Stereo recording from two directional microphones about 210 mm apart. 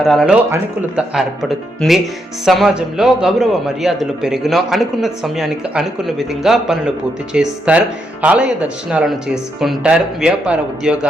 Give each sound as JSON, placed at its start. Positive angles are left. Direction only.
{"t": 0.0, "sound": "a man's voice", "side_deg": 0}